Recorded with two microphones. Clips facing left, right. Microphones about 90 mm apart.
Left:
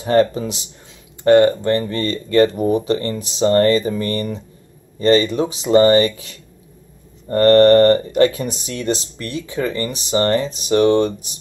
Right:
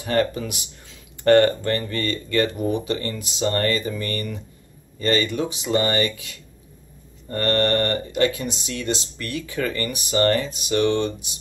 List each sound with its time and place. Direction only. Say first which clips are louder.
0.0 s speech: left 6 dB; 30° left (ahead or behind)